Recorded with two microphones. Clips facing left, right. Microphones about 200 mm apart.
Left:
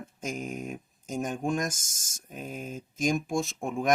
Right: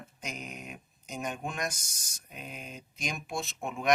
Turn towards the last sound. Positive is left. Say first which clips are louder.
# left 6 dB
turn(degrees=45)  # may be behind; listen again after turning